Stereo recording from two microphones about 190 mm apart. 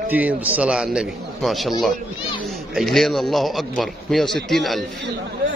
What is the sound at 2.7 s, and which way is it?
A man's voice, centre (ahead or behind).